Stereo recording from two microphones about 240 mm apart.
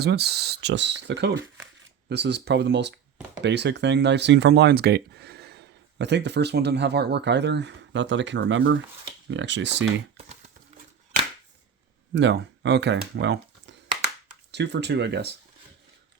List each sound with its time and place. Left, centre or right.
0.0 s speech: right
12.1 s speech: right
13.1 s a sound: right
14.5 s speech: right